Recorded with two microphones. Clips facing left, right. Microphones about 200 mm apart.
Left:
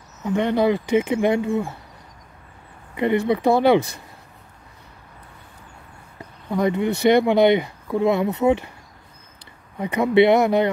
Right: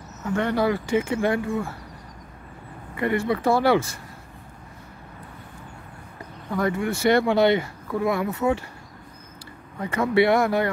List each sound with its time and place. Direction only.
0.2 s speech: 15° left (ahead or behind)
3.0 s speech: 20° left (ahead or behind)
6.5 s speech: 20° left (ahead or behind)
9.8 s speech: 15° left (ahead or behind)